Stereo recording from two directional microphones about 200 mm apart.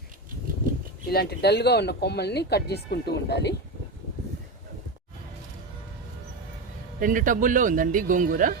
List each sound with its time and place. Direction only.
1.1 s speech: 55° left (ahead or behind)
7.0 s speech: 40° right (ahead or behind)